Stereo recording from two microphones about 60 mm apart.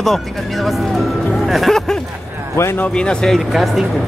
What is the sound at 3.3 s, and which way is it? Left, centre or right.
Speech, centre.